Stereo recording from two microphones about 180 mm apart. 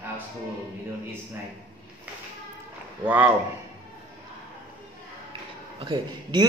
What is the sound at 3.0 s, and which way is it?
Speech, 10° right (ahead or behind).